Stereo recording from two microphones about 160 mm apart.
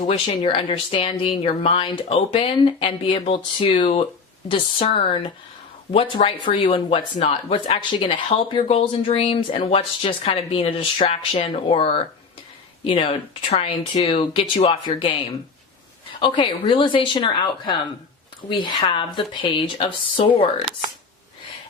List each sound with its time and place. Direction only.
0.3 s speech: 30° left (ahead or behind)
16.2 s speech: 30° left (ahead or behind)